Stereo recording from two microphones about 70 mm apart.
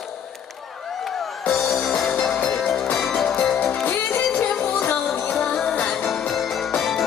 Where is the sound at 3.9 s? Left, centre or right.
Left.